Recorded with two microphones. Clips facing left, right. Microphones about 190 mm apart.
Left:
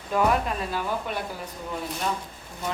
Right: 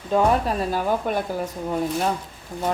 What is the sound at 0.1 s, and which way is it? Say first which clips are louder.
Speech: right 4 dB; 30° right (ahead or behind).